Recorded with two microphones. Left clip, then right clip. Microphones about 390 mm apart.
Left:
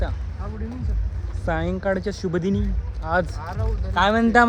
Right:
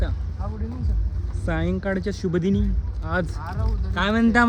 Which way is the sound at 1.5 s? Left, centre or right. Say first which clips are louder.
Left 3 dB; centre.